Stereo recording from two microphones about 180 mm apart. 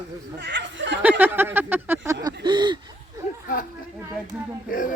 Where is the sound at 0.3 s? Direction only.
80° right.